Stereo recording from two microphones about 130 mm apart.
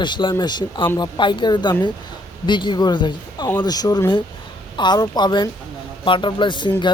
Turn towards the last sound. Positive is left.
turn(degrees=35)  # may be behind; listen again after turning